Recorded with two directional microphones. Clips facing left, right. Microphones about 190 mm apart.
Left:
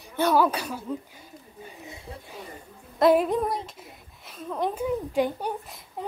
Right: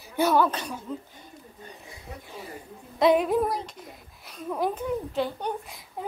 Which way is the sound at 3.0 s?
Centre (ahead or behind).